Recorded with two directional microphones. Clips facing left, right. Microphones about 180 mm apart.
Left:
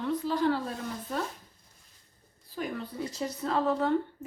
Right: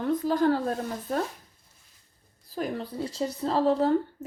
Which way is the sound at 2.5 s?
35° right (ahead or behind).